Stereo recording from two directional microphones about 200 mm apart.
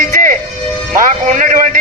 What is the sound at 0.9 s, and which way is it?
Speech, 40° right (ahead or behind).